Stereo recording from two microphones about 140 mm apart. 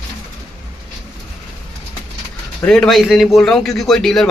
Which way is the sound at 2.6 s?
5° left (ahead or behind).